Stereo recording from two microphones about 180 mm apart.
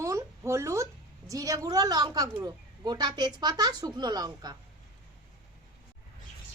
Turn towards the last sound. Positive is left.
turn(degrees=-20)  # may be behind; listen again after turning